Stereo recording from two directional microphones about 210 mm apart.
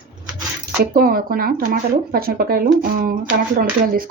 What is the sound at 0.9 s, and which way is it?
Speech, 45° right (ahead or behind).